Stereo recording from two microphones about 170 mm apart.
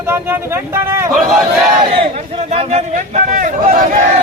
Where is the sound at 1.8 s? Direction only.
30° right (ahead or behind).